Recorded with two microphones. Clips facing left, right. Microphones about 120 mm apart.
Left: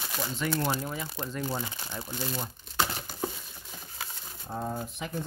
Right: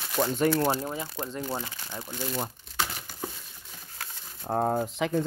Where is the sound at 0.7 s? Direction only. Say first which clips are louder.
Right 2 dB; 25° right (ahead or behind).